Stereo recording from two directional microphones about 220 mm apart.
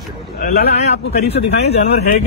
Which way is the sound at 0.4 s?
45° left (ahead or behind).